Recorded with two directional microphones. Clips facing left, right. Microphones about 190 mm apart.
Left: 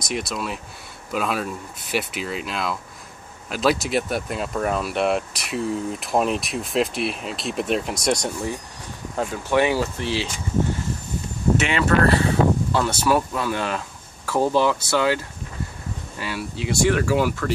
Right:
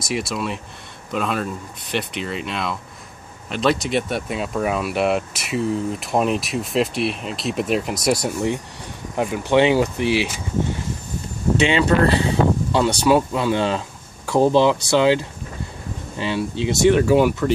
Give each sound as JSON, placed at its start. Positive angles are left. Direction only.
{"t": 0.0, "sound": "speech", "side_deg": 0}
{"t": 9.1, "sound": "speech", "side_deg": -15}
{"t": 11.6, "sound": "speech", "side_deg": -25}